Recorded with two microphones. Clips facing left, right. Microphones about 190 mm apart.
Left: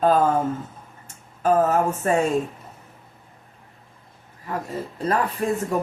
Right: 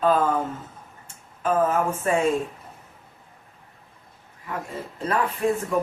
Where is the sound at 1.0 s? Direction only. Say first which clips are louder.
Left 4 dB; 40° left (ahead or behind).